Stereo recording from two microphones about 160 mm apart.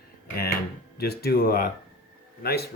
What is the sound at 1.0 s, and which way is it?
Speech, 75° left (ahead or behind).